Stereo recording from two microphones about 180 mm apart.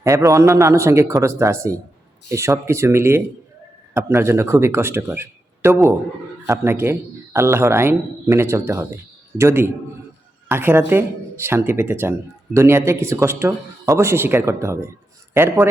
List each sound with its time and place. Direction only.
0.0 s a man's voice: 20° right (ahead or behind)